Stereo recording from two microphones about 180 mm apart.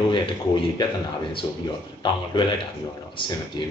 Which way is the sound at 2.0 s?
25° left (ahead or behind).